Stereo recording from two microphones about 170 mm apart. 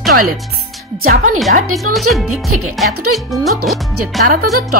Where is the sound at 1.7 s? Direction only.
Centre (ahead or behind).